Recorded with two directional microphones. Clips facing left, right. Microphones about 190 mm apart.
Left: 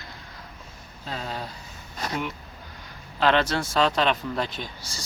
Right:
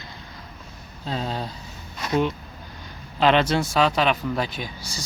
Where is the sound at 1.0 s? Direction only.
25° right (ahead or behind).